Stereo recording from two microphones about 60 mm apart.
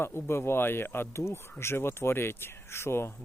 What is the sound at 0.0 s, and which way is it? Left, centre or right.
Speech, left.